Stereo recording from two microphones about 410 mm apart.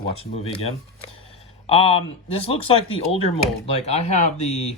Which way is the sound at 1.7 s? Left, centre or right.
Centre.